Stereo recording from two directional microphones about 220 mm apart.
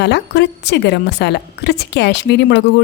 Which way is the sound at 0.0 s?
50° left (ahead or behind).